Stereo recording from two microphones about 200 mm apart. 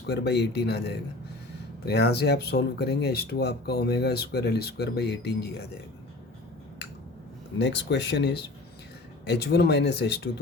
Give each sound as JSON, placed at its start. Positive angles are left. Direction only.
{"t": 0.1, "sound": "speech", "side_deg": 55}
{"t": 7.6, "sound": "speech", "side_deg": 60}